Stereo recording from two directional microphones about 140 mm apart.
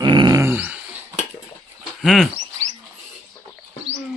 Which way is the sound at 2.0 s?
Centre (ahead or behind).